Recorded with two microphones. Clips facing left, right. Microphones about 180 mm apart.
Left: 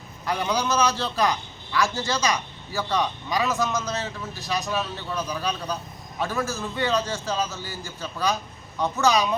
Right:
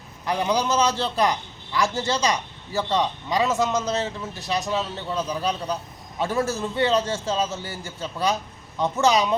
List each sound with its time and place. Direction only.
0.3 s a man's voice: 20° right (ahead or behind)